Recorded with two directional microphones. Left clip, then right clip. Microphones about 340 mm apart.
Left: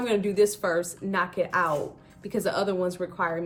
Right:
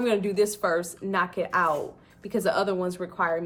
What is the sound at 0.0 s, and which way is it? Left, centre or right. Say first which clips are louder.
A woman's voice: left 1 dB; centre.